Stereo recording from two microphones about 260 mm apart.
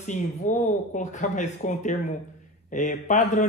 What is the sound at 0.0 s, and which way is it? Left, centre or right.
Speech, left.